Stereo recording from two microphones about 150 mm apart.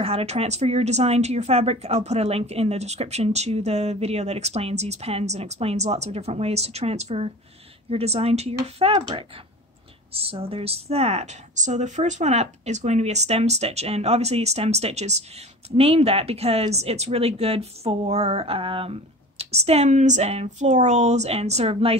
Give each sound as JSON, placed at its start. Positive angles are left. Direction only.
{"t": 0.0, "sound": "speech", "side_deg": -40}